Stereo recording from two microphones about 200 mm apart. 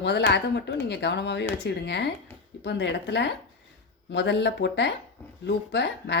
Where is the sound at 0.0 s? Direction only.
60° left (ahead or behind).